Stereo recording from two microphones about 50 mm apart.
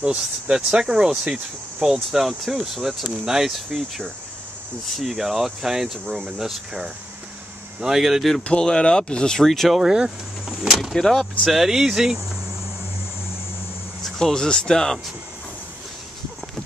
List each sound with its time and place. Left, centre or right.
0.0 s speech: centre
2.0 s speech: centre
8.5 s speech: centre
9.4 s speech: centre
9.8 s speech: centre
10.7 s speech: centre
11.0 s speech: centre
11.4 s speech: centre
14.2 s speech: centre